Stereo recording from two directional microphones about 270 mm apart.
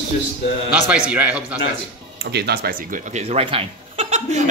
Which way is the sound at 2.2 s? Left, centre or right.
Right.